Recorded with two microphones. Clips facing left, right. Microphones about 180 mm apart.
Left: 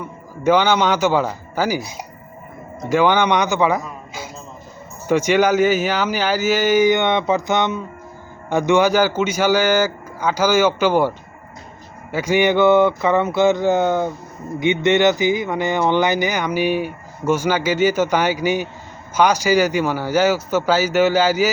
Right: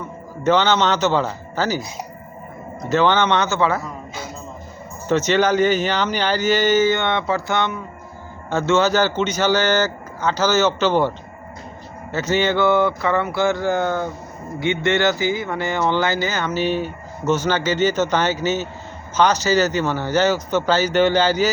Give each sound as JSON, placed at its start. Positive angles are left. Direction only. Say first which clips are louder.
{"t": 0.4, "sound": "speech", "louder": "left 1 dB", "side_deg": 10}
{"t": 2.9, "sound": "speech", "louder": "left 1 dB", "side_deg": 10}
{"t": 5.0, "sound": "speech", "louder": "left 2 dB", "side_deg": 10}
{"t": 12.1, "sound": "a sound", "louder": "left 3 dB", "side_deg": 10}
{"t": 14.6, "sound": "speech", "louder": "left 4 dB", "side_deg": 20}